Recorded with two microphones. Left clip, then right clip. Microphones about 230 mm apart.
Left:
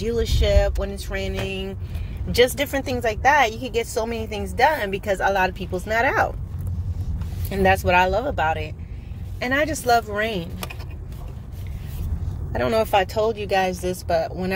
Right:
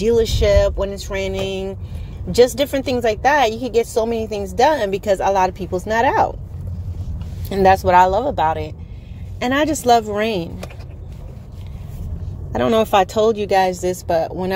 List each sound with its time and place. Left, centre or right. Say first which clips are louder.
0.0 s speech: right 8 dB; right
2.3 s speech: right 5 dB; right
2.8 s speech: right 3 dB; right
4.4 s speech: right 3 dB; right
7.4 s speech: right 5 dB; right
12.5 s speech: right 5 dB; right